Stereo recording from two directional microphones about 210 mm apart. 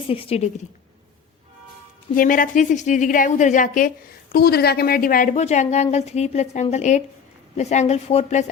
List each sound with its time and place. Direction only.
0.1 s a woman's voice: 30° left (ahead or behind)
2.1 s a woman's voice: 40° left (ahead or behind)